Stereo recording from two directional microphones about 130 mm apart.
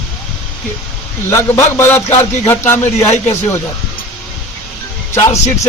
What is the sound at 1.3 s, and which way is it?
Speech, 20° left (ahead or behind).